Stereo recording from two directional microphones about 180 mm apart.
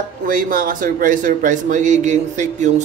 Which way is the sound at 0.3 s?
50° right (ahead or behind).